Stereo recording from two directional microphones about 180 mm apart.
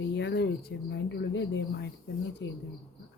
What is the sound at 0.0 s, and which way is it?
Speech, 85° left.